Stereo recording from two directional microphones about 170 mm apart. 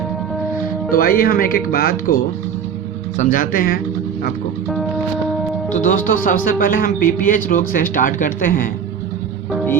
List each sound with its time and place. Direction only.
0.9 s speech: 60° left (ahead or behind)
5.7 s speech: 50° left (ahead or behind)